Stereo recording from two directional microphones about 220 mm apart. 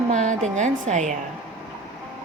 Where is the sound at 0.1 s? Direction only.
35° right (ahead or behind).